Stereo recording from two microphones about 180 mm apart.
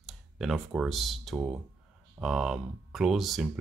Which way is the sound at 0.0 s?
Centre (ahead or behind).